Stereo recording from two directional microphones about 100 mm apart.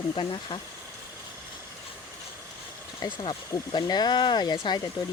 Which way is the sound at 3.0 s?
50° left (ahead or behind).